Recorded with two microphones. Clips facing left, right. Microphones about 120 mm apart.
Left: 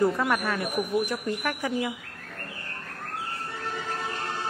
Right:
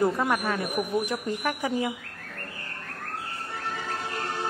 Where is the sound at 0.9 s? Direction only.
25° right (ahead or behind).